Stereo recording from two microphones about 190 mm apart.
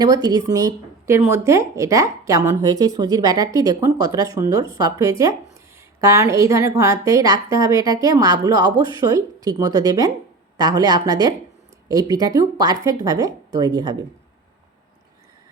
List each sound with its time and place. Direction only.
0.0 s a woman's voice: 20° right (ahead or behind)